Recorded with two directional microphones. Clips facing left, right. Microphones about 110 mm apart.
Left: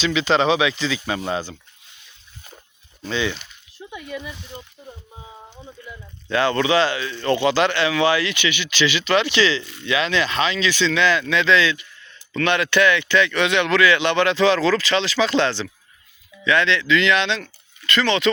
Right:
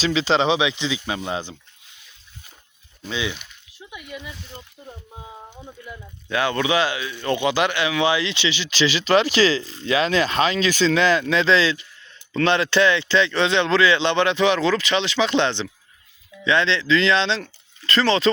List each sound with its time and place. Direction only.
0.0 s speech: 30° right (ahead or behind)
3.0 s speech: 10° right (ahead or behind)
5.5 s speech: 5° right (ahead or behind); by 18.3 s 35° right (ahead or behind)